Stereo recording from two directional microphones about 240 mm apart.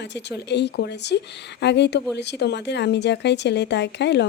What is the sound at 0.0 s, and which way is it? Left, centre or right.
Speech, left.